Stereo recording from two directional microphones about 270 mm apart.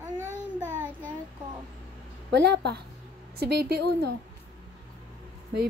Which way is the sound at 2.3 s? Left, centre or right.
Right.